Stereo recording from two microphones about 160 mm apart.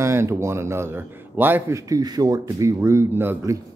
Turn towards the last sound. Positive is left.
turn(degrees=-15)  # may be behind; listen again after turning